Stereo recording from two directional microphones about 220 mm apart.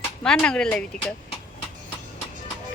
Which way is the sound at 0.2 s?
5° left (ahead or behind).